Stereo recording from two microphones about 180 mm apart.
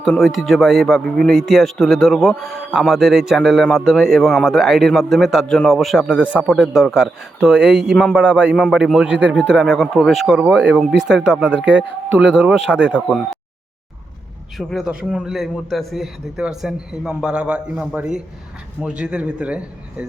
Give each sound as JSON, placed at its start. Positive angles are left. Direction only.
{"t": 0.0, "sound": "a man's voice", "side_deg": 0}
{"t": 14.6, "sound": "a man's voice", "side_deg": 0}